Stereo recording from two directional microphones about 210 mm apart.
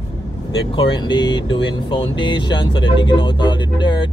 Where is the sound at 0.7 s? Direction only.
25° left (ahead or behind).